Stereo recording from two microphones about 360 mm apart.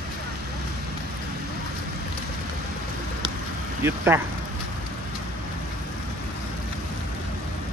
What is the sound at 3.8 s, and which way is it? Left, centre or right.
Speech, centre.